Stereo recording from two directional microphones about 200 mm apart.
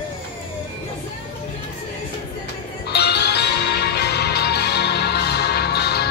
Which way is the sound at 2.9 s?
55° left (ahead or behind).